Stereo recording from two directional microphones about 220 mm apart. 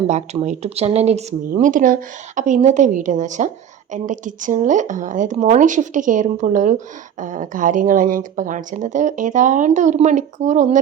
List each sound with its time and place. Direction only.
0.1 s a woman's voice: 30° right (ahead or behind)